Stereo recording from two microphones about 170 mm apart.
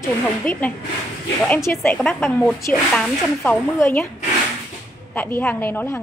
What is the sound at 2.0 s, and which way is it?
Speech, centre (ahead or behind).